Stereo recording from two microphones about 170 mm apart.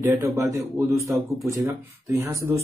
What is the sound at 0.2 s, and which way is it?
A man's voice, 15° right (ahead or behind).